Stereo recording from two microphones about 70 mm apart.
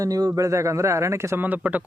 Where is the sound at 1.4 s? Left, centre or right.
Right.